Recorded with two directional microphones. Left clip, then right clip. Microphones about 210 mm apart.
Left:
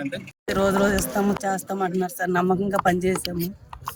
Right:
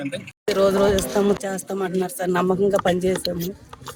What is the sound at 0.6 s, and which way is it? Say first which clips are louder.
Music: right 3 dB; 35° left (ahead or behind).